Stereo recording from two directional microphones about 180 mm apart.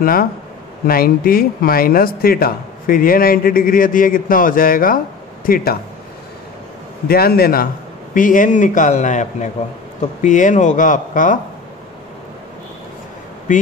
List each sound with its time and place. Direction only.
0.0 s a man's voice: 55° left (ahead or behind)
7.1 s a man's voice: 55° left (ahead or behind)
13.5 s a man's voice: 45° left (ahead or behind)